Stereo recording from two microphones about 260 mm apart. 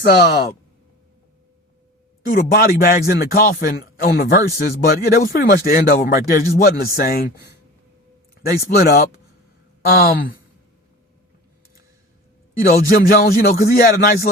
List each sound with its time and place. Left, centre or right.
0.0 s a man's voice: left
2.2 s a man's voice: left
8.4 s a man's voice: left
12.6 s a man's voice: left